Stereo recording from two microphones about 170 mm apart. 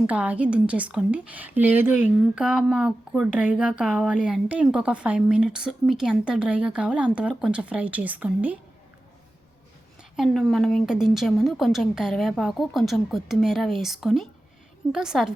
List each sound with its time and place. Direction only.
0.1 s speech: 10° right (ahead or behind)
10.0 s a woman's voice: centre (ahead or behind)